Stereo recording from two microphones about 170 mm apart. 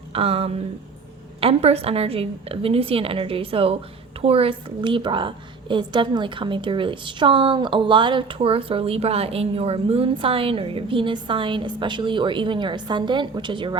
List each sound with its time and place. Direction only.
0.1 s a woman's voice: 35° right (ahead or behind)